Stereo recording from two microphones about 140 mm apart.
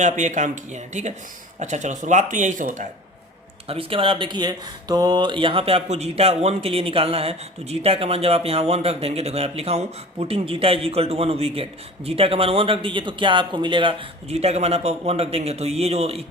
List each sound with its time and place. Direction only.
0.0 s speech: 60° right (ahead or behind)
3.7 s speech: 40° right (ahead or behind)